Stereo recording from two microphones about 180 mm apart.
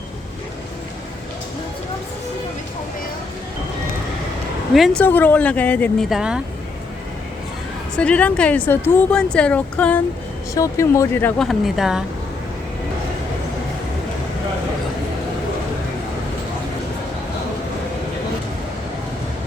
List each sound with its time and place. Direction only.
4.7 s speech: centre (ahead or behind)
5.0 s speech: 10° left (ahead or behind)
6.1 s speech: 5° right (ahead or behind)
7.9 s speech: 5° left (ahead or behind)
11.4 s speech: centre (ahead or behind)